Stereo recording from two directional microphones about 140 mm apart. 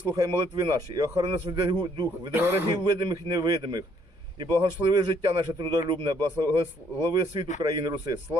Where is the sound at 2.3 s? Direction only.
15° right (ahead or behind).